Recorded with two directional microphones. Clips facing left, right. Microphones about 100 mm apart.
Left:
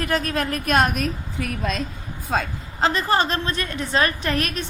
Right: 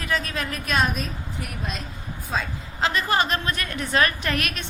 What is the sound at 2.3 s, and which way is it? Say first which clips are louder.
Speech: left 4 dB; 70° left (ahead or behind).